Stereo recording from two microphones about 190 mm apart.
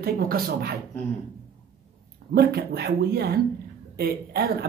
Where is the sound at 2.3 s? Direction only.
55° right (ahead or behind).